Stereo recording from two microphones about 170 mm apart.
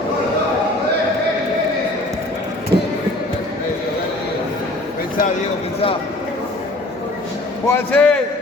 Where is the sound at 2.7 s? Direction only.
25° right (ahead or behind).